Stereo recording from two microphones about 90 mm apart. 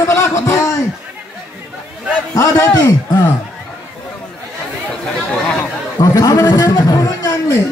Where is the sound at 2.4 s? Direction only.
40° left (ahead or behind).